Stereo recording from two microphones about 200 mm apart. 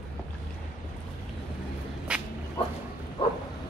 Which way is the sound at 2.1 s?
5° right (ahead or behind).